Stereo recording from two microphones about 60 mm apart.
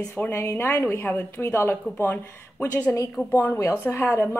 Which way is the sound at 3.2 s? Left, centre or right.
Centre.